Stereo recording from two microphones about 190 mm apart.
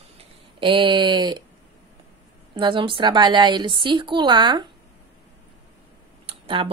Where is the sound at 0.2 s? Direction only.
25° right (ahead or behind).